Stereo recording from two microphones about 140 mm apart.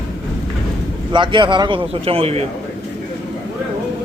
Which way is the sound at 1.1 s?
35° right (ahead or behind).